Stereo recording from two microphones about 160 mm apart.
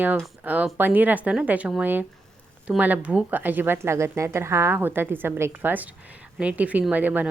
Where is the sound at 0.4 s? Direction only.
10° right (ahead or behind).